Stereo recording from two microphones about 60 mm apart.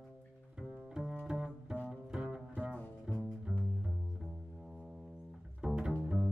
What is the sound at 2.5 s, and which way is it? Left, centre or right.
Double bass, centre.